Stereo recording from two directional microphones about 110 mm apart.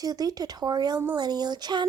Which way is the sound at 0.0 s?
35° right (ahead or behind).